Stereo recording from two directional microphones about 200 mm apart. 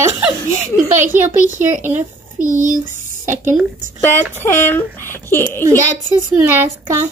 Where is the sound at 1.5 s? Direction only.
40° right (ahead or behind).